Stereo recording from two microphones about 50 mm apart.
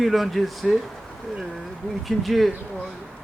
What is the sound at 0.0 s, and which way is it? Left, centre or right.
Speech, centre.